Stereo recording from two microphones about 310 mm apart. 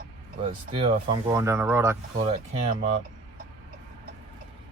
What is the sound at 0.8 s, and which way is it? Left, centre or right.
Speech, centre.